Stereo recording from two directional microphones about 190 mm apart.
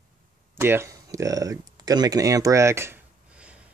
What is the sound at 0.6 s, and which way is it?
Speech, 10° right (ahead or behind).